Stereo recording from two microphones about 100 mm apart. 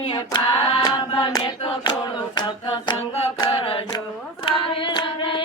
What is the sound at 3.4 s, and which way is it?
Chant, 55° left (ahead or behind).